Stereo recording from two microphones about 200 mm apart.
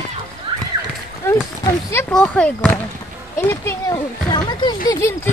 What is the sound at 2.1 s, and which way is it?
Speech, 10° left (ahead or behind).